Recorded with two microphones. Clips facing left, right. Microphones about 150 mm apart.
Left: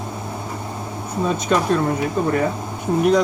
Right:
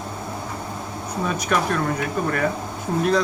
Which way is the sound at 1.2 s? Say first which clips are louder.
Left 4 dB; 25° left (ahead or behind).